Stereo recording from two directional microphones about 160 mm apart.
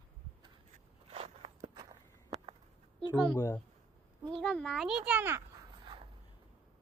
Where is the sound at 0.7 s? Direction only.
40° right (ahead or behind).